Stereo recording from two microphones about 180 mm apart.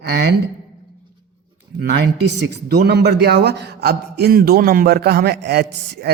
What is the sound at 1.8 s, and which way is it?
A man's voice, 75° right (ahead or behind).